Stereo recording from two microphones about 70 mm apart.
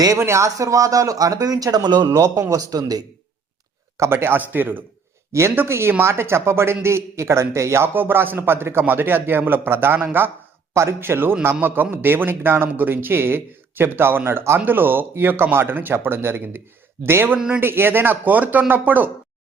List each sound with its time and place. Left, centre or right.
0.0 s speech: right
3.9 s a man's voice: right
5.3 s a woman's voice: right